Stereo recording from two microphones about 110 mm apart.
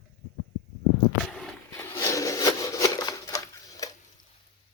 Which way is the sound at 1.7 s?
25° left (ahead or behind).